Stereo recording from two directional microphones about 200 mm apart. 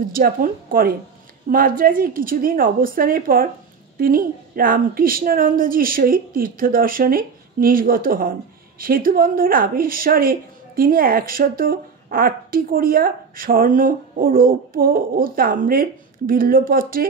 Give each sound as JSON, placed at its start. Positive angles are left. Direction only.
{"t": 0.1, "sound": "a woman's voice", "side_deg": -45}